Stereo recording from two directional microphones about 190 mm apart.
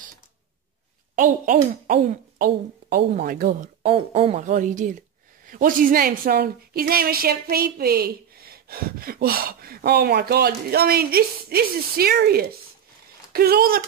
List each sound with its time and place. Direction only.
1.1 s a woman's voice: 45° right (ahead or behind)